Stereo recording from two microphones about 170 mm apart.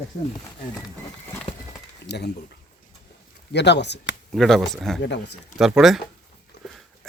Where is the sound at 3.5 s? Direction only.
90° left.